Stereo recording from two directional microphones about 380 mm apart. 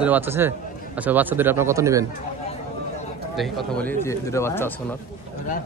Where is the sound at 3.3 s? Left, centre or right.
Centre.